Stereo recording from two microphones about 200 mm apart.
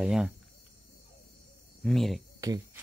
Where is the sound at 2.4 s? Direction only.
15° right (ahead or behind).